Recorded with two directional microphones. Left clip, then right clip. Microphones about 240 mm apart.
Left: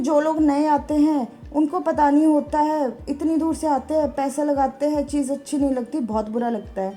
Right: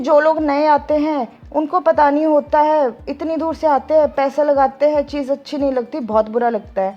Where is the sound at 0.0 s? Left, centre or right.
Right.